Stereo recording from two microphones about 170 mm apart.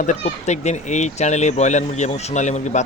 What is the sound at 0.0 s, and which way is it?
Speech, 45° left (ahead or behind).